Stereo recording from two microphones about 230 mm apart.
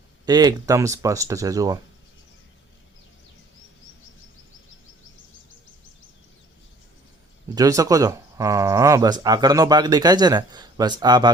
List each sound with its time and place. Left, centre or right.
0.3 s speech: centre
7.5 s speech: centre